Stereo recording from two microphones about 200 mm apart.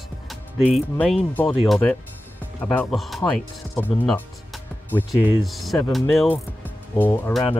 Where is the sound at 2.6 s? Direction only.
10° left (ahead or behind).